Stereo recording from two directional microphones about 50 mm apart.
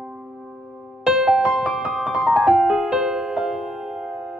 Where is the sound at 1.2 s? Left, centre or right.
Centre.